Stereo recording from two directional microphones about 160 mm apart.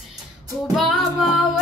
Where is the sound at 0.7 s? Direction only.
Centre (ahead or behind).